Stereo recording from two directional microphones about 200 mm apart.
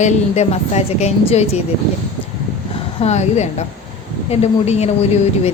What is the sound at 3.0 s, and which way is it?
A woman's voice, 35° left (ahead or behind).